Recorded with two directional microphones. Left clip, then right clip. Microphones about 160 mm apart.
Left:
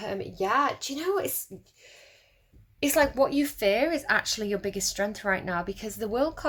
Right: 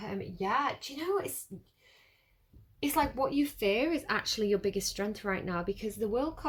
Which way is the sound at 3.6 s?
20° left (ahead or behind).